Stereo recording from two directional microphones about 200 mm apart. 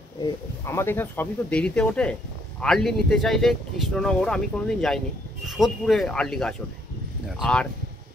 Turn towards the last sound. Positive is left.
turn(degrees=5)  # may be behind; listen again after turning